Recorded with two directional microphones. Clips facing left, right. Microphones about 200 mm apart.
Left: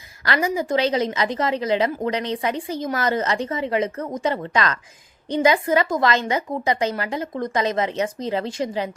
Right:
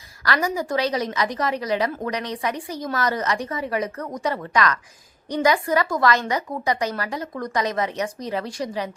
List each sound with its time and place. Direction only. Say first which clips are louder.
0.4 s a woman's voice: left 4 dB; 20° left (ahead or behind)